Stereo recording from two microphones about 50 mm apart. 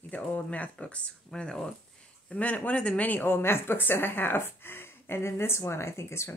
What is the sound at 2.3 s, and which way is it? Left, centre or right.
Speech, left.